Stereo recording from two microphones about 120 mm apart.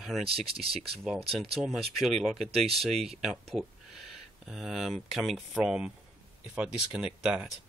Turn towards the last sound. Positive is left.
turn(degrees=-5)  # may be behind; listen again after turning